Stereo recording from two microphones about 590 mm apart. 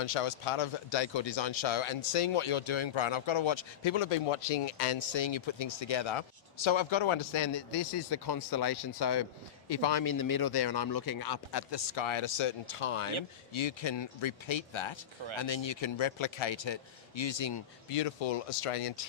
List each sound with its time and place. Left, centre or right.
0.0 s speech: left
8.1 s a man's voice: left